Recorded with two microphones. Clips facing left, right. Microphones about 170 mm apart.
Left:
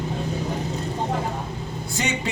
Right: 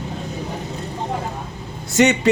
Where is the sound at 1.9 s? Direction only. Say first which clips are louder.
Right 12 dB; 75° right (ahead or behind).